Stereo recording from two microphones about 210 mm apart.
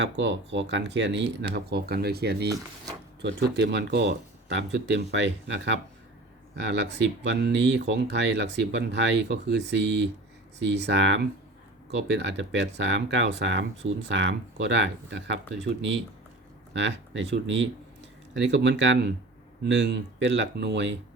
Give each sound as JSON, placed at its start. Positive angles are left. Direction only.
{"t": 0.0, "sound": "speech", "side_deg": -55}
{"t": 16.7, "sound": "speech", "side_deg": -60}